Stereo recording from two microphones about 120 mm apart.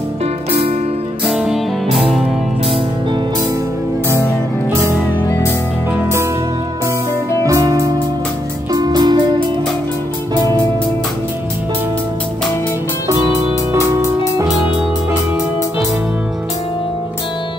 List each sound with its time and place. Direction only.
0.5 s music: 55° right (ahead or behind)
1.2 s music: centre (ahead or behind)
7.4 s music: 25° right (ahead or behind)